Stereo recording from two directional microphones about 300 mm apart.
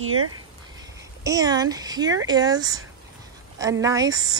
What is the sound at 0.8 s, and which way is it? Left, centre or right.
Speech, centre.